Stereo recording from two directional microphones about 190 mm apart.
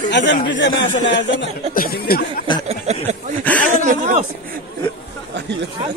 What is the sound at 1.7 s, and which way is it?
Speech, 50° left (ahead or behind).